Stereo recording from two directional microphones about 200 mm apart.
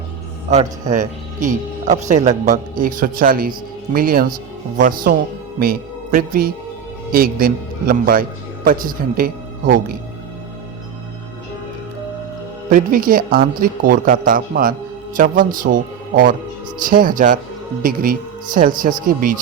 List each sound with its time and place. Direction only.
0.9 s speech: 40° right (ahead or behind)
12.7 s speech: 45° right (ahead or behind)